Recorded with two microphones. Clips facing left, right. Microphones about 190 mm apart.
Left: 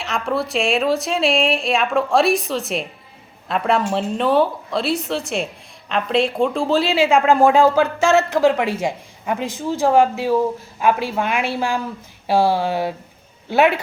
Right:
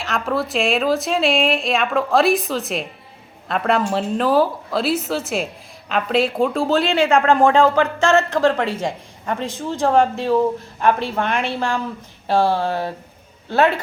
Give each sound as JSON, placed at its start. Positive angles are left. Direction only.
{"t": 0.0, "sound": "speech", "side_deg": 0}